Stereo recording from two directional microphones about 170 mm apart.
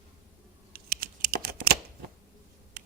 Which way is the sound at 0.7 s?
65° right (ahead or behind).